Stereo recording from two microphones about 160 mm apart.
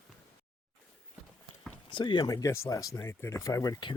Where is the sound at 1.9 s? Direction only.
30° left (ahead or behind).